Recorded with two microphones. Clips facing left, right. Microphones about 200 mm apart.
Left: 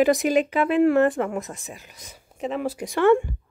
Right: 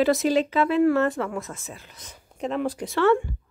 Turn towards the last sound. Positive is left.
turn(degrees=15)  # may be behind; listen again after turning